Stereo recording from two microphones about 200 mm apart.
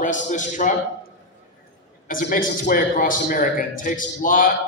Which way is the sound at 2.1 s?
45° left (ahead or behind).